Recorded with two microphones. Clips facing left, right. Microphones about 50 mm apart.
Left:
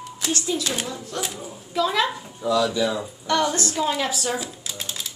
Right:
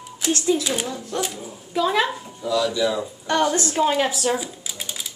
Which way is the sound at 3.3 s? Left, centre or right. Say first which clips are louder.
Right 2 dB; right.